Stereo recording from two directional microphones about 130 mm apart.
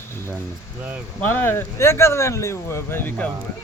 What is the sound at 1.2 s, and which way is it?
Speech, 15° left (ahead or behind).